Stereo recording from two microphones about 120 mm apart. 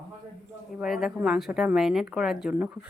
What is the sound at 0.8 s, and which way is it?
Speech, 5° right (ahead or behind).